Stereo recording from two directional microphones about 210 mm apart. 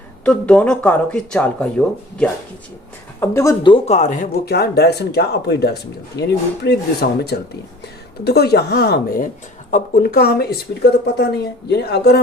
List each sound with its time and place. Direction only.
0.3 s speech: 5° left (ahead or behind); by 12.2 s 50° left (ahead or behind)